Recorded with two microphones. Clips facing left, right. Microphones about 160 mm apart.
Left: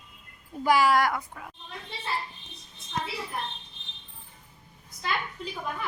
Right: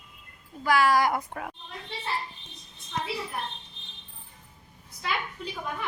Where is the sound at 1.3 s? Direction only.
65° right (ahead or behind).